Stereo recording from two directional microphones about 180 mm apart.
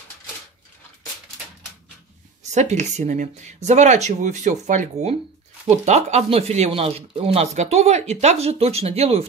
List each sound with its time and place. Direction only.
2.5 s speech: 40° right (ahead or behind)